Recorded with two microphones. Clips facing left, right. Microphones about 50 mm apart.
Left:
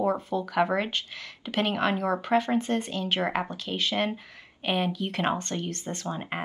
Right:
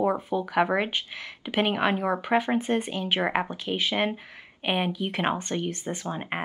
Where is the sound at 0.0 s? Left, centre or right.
Centre.